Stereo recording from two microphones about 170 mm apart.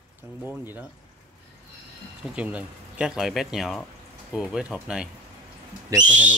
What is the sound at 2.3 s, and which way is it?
Speech, 5° right (ahead or behind).